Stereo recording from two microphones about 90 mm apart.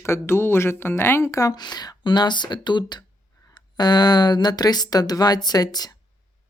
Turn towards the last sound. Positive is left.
turn(degrees=45)  # may be behind; listen again after turning